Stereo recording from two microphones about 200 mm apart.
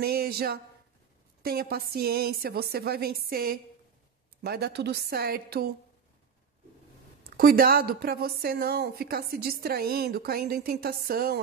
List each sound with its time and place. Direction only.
0.0 s a woman's voice: 50° right (ahead or behind)
7.2 s a woman's voice: 50° right (ahead or behind)